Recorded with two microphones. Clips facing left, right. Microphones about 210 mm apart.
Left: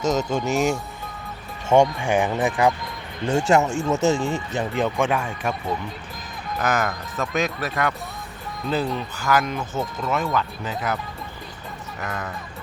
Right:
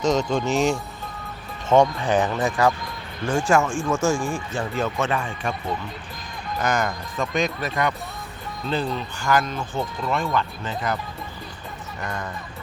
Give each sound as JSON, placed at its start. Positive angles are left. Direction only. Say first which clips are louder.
{"t": 0.0, "sound": "speech", "louder": "right 1 dB", "side_deg": 5}